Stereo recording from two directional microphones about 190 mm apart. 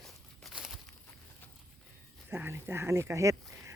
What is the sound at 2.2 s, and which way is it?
Speech, 10° right (ahead or behind).